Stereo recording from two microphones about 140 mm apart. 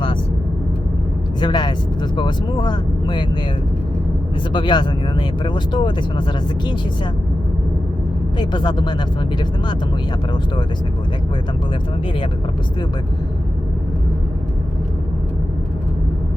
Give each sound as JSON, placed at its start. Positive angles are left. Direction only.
{"t": 1.4, "sound": "speech", "side_deg": 30}
{"t": 4.5, "sound": "speech", "side_deg": 35}
{"t": 8.4, "sound": "speech", "side_deg": 30}